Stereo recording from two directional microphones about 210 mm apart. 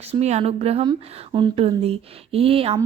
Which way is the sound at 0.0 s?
30° right (ahead or behind).